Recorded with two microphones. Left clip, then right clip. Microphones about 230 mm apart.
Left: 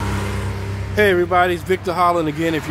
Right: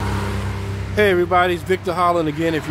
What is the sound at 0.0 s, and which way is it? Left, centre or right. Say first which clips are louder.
Vehicle: even; centre.